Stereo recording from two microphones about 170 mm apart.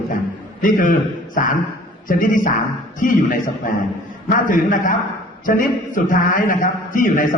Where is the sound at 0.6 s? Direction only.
55° left (ahead or behind).